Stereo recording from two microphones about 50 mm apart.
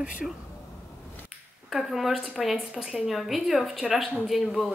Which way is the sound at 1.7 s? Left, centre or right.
Centre.